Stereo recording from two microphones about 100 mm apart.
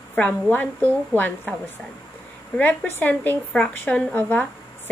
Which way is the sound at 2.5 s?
15° left (ahead or behind).